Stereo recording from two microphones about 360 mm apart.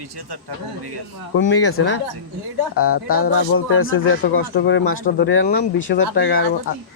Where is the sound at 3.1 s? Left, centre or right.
Left.